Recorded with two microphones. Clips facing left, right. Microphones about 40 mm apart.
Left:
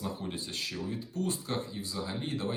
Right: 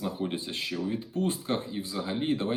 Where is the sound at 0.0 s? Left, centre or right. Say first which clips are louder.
Right 5 dB; right.